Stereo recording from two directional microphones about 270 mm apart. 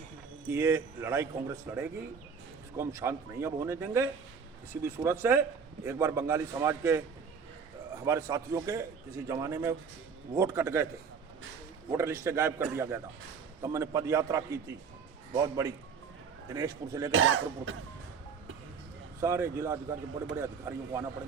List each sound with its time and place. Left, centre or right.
0.4 s a man's voice: centre
8.0 s a man's voice: centre
11.9 s a man's voice: centre
17.1 s speech: right
19.2 s a man's voice: centre